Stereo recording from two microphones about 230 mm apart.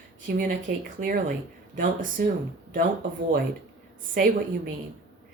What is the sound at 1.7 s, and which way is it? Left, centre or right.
Speech, right.